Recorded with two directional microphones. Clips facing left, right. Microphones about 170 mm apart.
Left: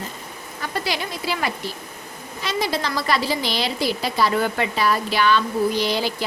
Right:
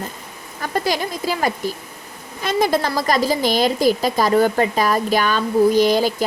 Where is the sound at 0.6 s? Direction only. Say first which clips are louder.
Right 5 dB; 45° right (ahead or behind).